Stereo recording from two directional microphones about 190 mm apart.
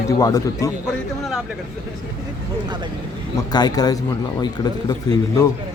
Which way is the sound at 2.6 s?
25° right (ahead or behind).